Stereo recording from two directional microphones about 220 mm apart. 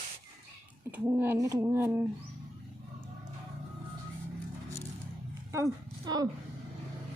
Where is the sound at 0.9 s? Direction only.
10° right (ahead or behind).